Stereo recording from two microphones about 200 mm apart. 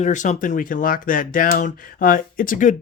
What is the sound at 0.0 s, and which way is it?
Speech, 35° left (ahead or behind).